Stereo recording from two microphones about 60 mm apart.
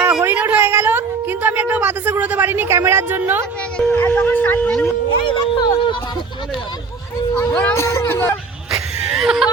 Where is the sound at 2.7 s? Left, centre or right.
Right.